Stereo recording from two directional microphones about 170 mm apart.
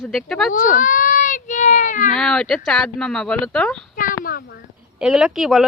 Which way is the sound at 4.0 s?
55° left (ahead or behind).